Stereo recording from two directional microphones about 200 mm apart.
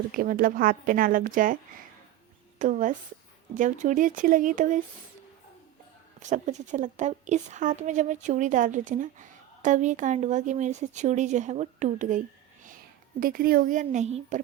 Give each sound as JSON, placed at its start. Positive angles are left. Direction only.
{"t": 0.1, "sound": "a woman's voice", "side_deg": -45}
{"t": 2.6, "sound": "a woman's voice", "side_deg": -40}
{"t": 6.2, "sound": "a woman's voice", "side_deg": -35}